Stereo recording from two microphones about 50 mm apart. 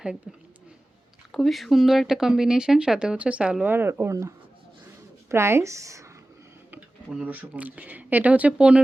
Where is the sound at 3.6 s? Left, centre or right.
Right.